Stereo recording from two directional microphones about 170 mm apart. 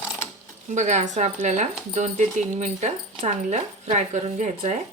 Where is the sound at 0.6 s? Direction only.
45° right (ahead or behind).